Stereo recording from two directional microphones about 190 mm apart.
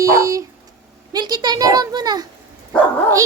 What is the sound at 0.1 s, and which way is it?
Speech, 15° right (ahead or behind).